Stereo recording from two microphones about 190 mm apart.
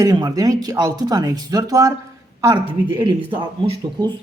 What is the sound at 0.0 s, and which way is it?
Speech, 20° right (ahead or behind).